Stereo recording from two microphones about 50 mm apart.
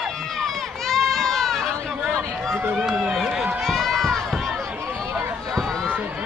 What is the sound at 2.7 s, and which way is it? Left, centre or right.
Run, centre.